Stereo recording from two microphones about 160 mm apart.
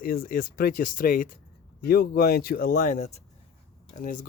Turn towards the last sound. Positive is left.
turn(degrees=55)  # may be behind; listen again after turning